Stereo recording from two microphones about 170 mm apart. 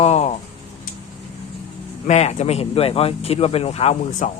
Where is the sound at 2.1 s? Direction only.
40° left (ahead or behind).